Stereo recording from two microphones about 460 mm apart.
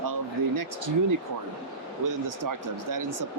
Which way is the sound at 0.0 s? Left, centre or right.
Right.